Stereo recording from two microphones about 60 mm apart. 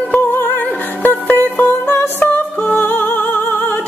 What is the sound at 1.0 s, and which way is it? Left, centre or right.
Music, left.